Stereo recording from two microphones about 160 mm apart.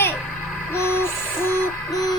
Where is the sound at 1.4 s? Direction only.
20° left (ahead or behind).